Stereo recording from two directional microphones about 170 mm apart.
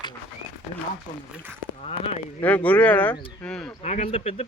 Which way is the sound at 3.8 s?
40° left (ahead or behind).